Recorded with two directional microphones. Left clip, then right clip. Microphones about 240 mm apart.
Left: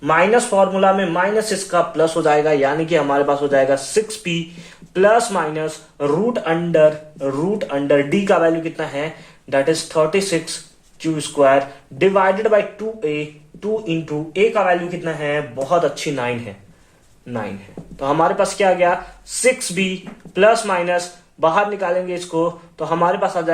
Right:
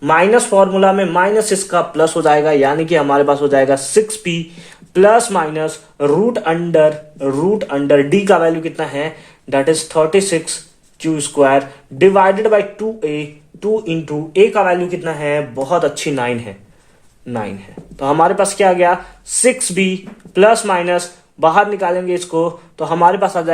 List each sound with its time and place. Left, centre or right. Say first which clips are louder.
0.0 s speech: right 3 dB; right
18.0 s speech: right 4 dB; right